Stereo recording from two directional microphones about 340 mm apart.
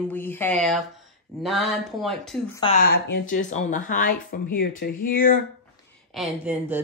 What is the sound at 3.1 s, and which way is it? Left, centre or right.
Speech, left.